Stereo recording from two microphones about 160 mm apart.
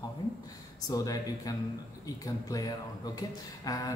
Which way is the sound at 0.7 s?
20° left (ahead or behind).